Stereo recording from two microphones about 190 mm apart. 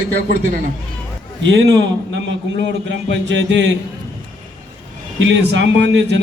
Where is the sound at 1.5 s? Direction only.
70° right (ahead or behind).